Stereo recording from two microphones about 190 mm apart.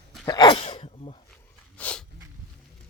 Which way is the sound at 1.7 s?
5° left (ahead or behind).